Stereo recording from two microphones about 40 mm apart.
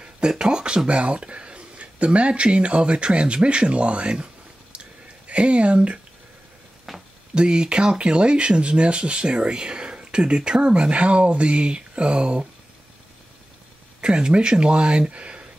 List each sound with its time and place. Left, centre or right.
0.0 s speech: right
0.8 s speech: right
4.7 s a sound: right
6.9 s a sound: centre
7.3 s speech: right
14.0 s speech: right